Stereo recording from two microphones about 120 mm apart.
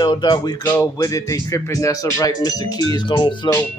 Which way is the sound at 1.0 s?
25° left (ahead or behind).